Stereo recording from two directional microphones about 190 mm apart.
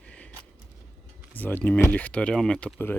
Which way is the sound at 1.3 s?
10° left (ahead or behind).